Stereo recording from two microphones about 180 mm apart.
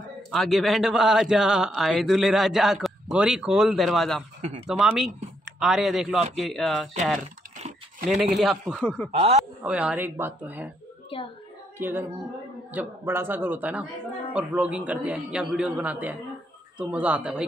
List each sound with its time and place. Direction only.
0.3 s speech: centre (ahead or behind)
7.2 s a sound: 45° right (ahead or behind)
8.4 s speech: centre (ahead or behind)
9.6 s a man's voice: 5° right (ahead or behind)
11.1 s a child's voice: 30° left (ahead or behind)
11.8 s a man's voice: 10° right (ahead or behind)